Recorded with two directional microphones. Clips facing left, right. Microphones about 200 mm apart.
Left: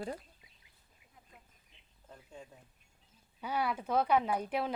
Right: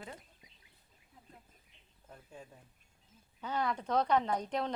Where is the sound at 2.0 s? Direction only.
5° right (ahead or behind).